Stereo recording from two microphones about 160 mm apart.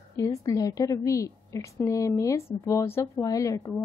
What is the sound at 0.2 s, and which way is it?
Speech, 20° left (ahead or behind).